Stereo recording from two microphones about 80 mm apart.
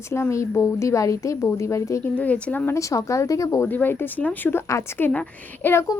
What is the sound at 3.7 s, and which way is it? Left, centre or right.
Speech, left.